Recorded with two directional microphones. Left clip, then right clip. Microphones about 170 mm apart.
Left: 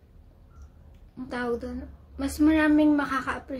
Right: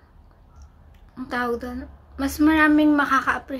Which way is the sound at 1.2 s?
10° left (ahead or behind).